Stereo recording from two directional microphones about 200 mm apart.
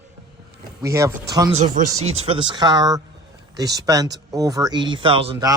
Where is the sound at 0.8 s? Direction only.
15° right (ahead or behind).